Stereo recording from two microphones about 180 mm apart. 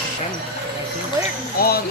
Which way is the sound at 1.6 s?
55° left (ahead or behind).